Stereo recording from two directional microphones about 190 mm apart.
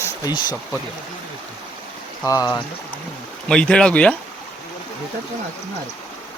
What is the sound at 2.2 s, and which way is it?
Speech, 20° left (ahead or behind).